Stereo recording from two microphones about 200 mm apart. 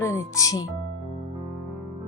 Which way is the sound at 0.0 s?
15° left (ahead or behind).